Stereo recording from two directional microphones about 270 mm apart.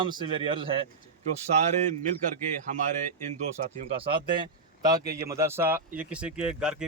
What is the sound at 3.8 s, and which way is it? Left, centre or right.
Speech, right.